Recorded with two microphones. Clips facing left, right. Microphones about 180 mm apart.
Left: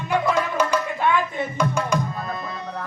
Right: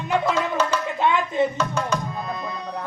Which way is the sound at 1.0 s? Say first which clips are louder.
Right 6 dB; 20° right (ahead or behind).